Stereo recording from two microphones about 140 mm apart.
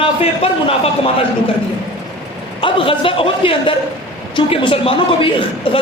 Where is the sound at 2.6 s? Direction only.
40° left (ahead or behind).